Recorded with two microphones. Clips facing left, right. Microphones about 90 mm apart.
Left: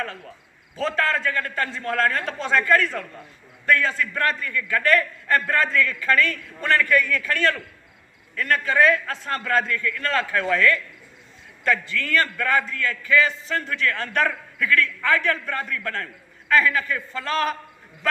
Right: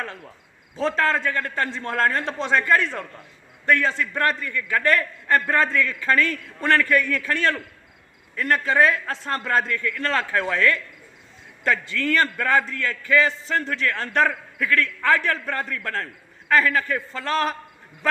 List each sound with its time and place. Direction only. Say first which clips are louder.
0.8 s a man's voice: right 2 dB; 25° right (ahead or behind)